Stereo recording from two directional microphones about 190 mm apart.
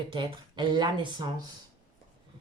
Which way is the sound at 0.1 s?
25° right (ahead or behind).